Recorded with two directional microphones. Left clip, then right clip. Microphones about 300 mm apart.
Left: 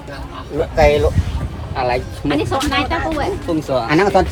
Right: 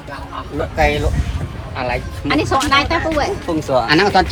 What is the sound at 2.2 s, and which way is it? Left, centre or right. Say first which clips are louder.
Speech: right 4 dB; right.